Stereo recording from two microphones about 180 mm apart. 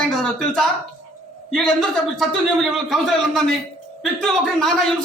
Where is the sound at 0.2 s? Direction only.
Centre (ahead or behind).